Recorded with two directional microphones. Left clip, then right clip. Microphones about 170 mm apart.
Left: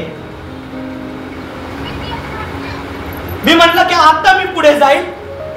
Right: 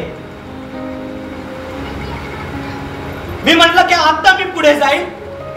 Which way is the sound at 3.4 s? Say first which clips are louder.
Left 1 dB; 40° right (ahead or behind).